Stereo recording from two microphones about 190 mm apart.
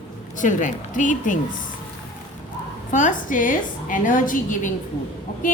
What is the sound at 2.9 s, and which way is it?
A woman's voice, 40° left (ahead or behind).